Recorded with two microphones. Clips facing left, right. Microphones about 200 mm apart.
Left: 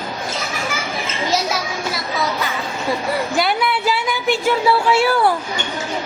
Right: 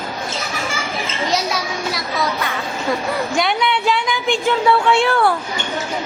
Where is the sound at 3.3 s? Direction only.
5° left (ahead or behind).